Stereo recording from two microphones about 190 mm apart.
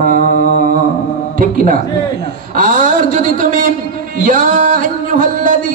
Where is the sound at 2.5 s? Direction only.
45° right (ahead or behind).